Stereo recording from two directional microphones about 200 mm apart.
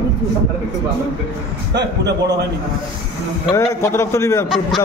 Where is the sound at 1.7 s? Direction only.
60° right (ahead or behind).